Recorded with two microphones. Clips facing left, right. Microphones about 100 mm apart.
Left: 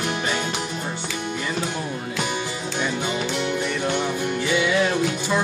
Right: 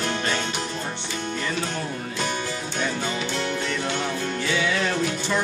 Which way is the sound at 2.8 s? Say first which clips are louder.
Left 2 dB; 15° left (ahead or behind).